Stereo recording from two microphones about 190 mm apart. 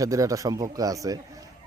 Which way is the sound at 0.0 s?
15° right (ahead or behind).